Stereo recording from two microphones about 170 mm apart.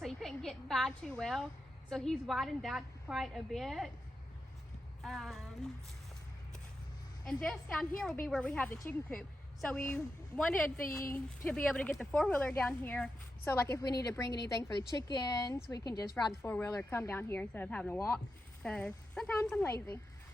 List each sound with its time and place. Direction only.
0.0 s a sound: centre (ahead or behind)
1.9 s a woman's voice: 5° left (ahead or behind)
5.0 s a woman's voice: centre (ahead or behind)
7.3 s a woman's voice: 5° left (ahead or behind)